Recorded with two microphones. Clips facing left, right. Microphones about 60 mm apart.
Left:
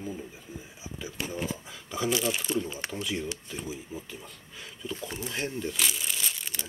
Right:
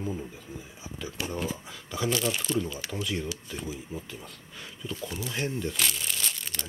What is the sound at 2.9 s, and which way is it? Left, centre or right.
Speech, centre.